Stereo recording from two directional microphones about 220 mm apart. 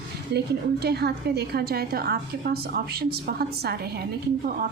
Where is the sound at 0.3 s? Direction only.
45° right (ahead or behind).